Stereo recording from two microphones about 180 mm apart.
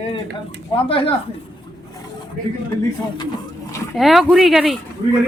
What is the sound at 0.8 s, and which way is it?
Speech, 30° left (ahead or behind).